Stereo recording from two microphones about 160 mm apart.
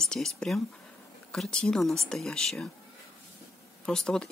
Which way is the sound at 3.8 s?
5° left (ahead or behind).